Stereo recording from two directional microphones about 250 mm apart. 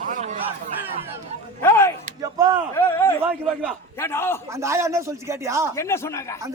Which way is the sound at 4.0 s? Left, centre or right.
Centre.